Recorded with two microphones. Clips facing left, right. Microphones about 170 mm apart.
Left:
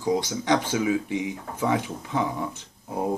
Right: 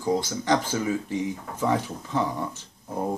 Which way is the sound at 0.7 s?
10° left (ahead or behind).